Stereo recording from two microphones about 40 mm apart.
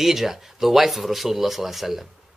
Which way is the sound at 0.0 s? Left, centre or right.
Centre.